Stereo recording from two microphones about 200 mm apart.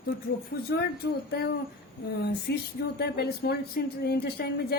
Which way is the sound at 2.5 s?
60° left (ahead or behind).